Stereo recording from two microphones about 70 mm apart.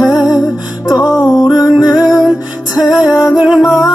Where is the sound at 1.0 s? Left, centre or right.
Left.